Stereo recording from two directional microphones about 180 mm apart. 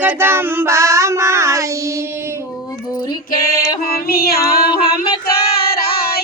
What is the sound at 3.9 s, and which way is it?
Female singing, 60° left (ahead or behind).